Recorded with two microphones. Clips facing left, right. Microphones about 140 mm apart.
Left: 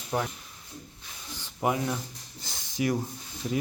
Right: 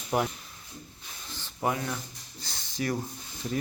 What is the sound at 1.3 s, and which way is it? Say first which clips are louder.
Speech: left 2 dB; 15° left (ahead or behind).